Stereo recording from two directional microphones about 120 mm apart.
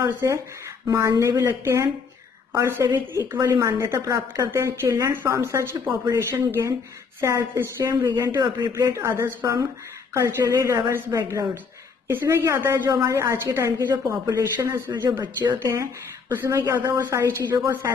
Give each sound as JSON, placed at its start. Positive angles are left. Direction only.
{"t": 0.0, "sound": "speech", "side_deg": -25}
{"t": 3.3, "sound": "speech", "side_deg": -30}
{"t": 12.1, "sound": "speech", "side_deg": -20}
{"t": 15.1, "sound": "speech", "side_deg": -35}
{"t": 15.7, "sound": "speech", "side_deg": -20}